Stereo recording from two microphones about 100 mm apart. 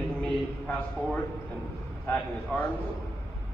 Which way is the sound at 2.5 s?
10° left (ahead or behind).